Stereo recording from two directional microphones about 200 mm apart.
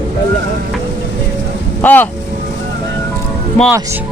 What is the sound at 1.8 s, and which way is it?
Speech, 10° left (ahead or behind).